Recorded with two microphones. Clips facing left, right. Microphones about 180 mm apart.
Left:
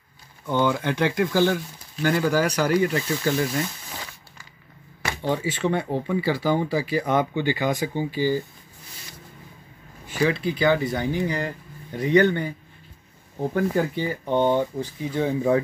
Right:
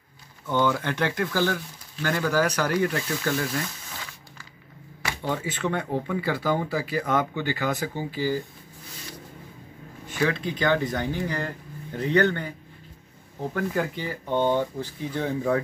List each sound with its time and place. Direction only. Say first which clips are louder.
0.5 s speech: left 2 dB; 15° left (ahead or behind)
5.3 s speech: left 4 dB; 10° left (ahead or behind)
10.0 s speech: left 3 dB; 10° left (ahead or behind)
13.5 s speech: left 4 dB; 25° left (ahead or behind)